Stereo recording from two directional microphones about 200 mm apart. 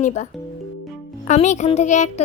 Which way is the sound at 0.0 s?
35° left (ahead or behind).